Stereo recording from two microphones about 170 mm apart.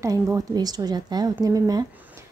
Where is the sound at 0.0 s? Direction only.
20° right (ahead or behind).